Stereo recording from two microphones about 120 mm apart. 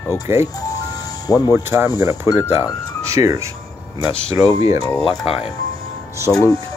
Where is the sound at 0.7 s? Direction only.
30° left (ahead or behind).